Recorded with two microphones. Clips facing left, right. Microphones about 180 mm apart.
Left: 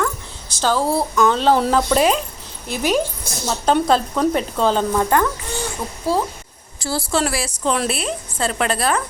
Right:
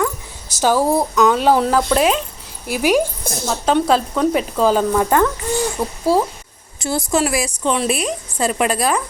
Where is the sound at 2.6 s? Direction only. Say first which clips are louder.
Right 3 dB; 10° right (ahead or behind).